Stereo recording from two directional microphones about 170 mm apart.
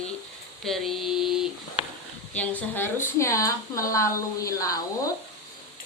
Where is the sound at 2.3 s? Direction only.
10° left (ahead or behind).